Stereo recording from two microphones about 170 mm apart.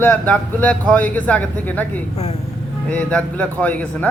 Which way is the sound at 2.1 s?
40° left (ahead or behind).